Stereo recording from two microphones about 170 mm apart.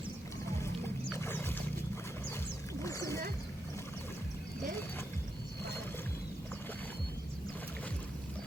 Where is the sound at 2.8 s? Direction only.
15° left (ahead or behind).